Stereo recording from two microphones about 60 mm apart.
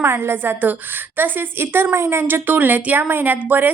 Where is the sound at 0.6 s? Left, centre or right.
Right.